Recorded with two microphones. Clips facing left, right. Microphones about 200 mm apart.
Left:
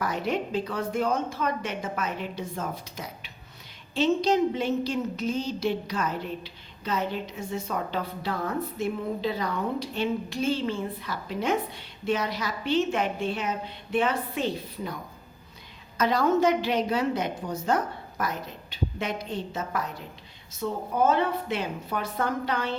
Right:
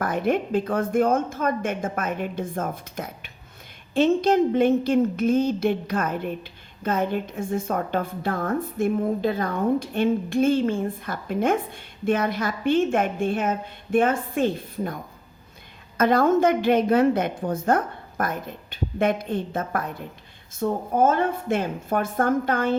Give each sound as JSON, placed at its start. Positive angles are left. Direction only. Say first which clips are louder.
{"t": 0.0, "sound": "a woman's voice", "louder": "right 5 dB", "side_deg": -50}
{"t": 16.0, "sound": "a woman's voice", "louder": "right 4 dB", "side_deg": -50}